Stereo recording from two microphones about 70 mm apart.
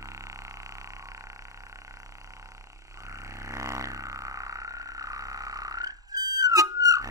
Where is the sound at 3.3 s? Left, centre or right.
Right.